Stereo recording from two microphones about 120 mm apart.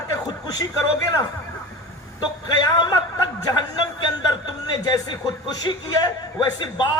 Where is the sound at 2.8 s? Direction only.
30° left (ahead or behind).